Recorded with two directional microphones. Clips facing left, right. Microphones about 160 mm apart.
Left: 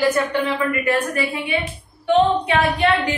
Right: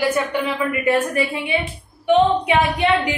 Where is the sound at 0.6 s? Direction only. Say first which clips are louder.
Right 2 dB; 20° right (ahead or behind).